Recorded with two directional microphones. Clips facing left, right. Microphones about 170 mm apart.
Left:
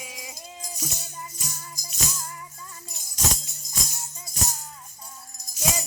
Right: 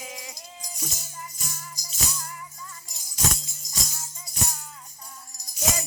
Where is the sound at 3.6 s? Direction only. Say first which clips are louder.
Even; 55° left (ahead or behind).